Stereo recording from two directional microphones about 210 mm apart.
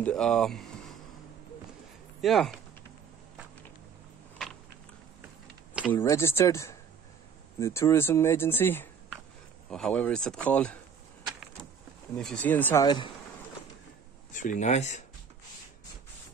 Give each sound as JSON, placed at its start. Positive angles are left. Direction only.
{"t": 0.0, "sound": "a sound", "side_deg": 0}
{"t": 2.2, "sound": "speech", "side_deg": 0}
{"t": 5.9, "sound": "speech", "side_deg": 10}
{"t": 12.2, "sound": "speech", "side_deg": 5}
{"t": 14.3, "sound": "speech", "side_deg": 35}